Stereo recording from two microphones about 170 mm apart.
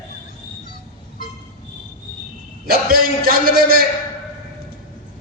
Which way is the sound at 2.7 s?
60° right (ahead or behind).